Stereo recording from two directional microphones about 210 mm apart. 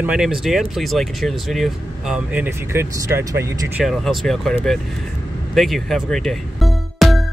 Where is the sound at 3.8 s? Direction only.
Centre (ahead or behind).